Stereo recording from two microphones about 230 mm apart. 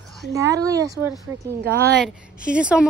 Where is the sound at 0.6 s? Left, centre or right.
Centre.